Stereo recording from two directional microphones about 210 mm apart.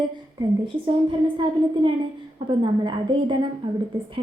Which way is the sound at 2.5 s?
20° right (ahead or behind).